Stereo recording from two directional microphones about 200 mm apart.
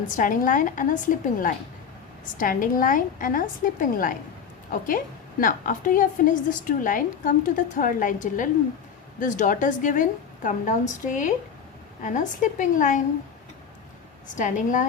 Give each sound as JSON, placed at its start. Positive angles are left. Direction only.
{"t": 0.1, "sound": "a woman's voice", "side_deg": 40}
{"t": 14.3, "sound": "a woman's voice", "side_deg": 40}